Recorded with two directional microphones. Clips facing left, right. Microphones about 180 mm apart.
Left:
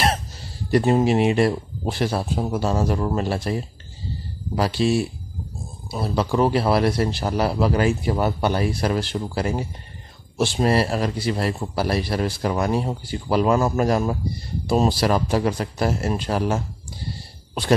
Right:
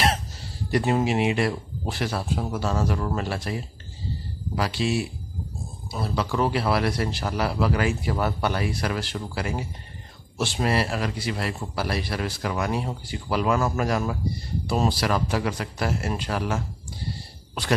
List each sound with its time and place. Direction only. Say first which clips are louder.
0.7 s a man's voice: left 5 dB; 35° left (ahead or behind)